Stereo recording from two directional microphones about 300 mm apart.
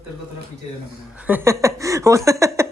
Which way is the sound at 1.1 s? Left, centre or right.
Centre.